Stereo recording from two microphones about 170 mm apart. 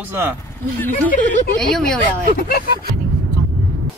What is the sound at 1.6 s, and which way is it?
Speech, 5° left (ahead or behind).